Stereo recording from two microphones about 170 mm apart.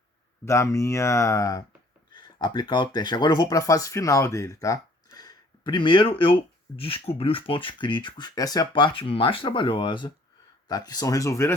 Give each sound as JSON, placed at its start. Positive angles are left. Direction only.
{"t": 0.4, "sound": "speech", "side_deg": 15}